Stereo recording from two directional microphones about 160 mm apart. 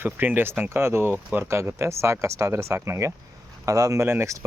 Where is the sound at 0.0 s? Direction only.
10° right (ahead or behind).